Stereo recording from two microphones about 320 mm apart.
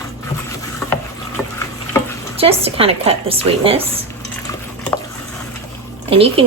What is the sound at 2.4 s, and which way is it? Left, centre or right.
Speech, centre.